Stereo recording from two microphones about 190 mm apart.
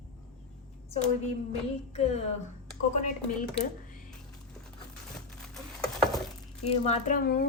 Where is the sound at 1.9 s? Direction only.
35° left (ahead or behind).